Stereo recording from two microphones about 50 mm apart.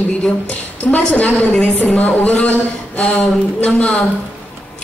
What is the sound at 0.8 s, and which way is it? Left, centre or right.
Speech, left.